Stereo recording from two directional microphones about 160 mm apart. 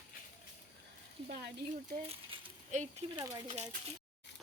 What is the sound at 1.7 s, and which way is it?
Speech, 40° right (ahead or behind).